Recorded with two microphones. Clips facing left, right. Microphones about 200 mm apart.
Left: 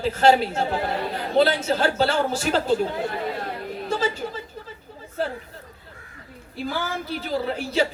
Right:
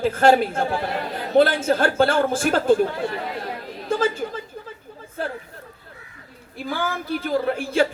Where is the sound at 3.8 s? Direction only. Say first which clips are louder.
Right 4 dB; 50° right (ahead or behind).